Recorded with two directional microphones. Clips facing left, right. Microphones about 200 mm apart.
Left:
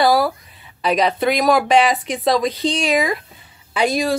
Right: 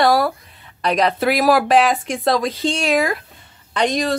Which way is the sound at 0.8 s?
Centre (ahead or behind).